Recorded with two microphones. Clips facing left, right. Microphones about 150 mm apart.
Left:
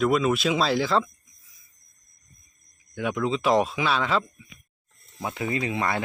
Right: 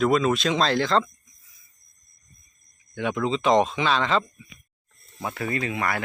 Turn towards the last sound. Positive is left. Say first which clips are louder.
# left 1 dB
turn(degrees=25)  # may be behind; listen again after turning